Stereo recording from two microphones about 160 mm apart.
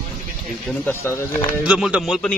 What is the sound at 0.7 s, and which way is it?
Speech, 15° left (ahead or behind).